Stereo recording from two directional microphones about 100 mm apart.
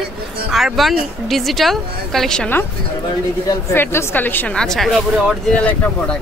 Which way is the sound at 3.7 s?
25° left (ahead or behind).